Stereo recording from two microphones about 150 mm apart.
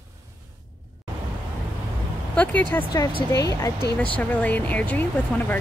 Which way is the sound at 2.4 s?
10° left (ahead or behind).